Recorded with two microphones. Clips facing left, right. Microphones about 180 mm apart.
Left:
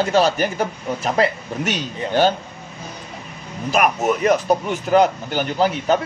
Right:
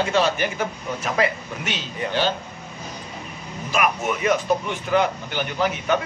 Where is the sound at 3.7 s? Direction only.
40° left (ahead or behind).